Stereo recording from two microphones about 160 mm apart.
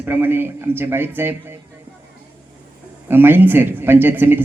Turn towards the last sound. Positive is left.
turn(degrees=-15)  # may be behind; listen again after turning